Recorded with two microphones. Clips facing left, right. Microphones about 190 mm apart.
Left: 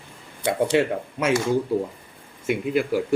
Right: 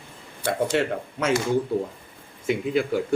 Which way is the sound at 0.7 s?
10° left (ahead or behind).